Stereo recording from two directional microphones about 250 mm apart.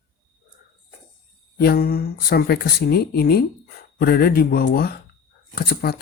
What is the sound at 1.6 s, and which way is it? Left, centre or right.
Speech, left.